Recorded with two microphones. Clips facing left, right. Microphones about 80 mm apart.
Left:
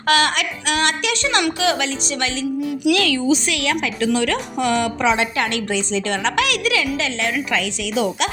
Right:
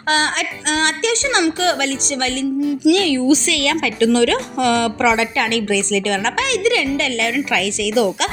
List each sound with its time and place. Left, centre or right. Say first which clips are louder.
0.1 s music: left 1 dB; right
1.1 s speech: right 3 dB; right
1.6 s a woman's voice: right 2 dB; right
2.9 s music: right 1 dB; right
3.2 s a woman's voice: right 3 dB; right
6.3 s a woman's voice: right 2 dB; right
7.5 s a woman's voice: right 4 dB; right